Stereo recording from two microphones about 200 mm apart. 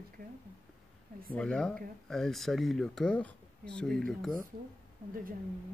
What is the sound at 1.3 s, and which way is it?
Speech, 5° left (ahead or behind).